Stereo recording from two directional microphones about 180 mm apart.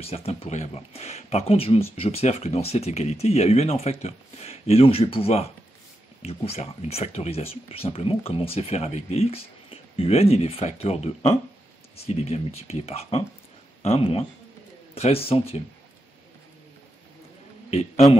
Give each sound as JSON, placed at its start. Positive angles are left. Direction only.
{"t": 0.0, "sound": "speech", "side_deg": 35}
{"t": 17.6, "sound": "a man's voice", "side_deg": 35}